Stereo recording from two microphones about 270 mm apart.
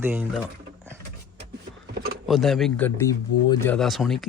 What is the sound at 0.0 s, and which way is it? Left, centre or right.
Speech, centre.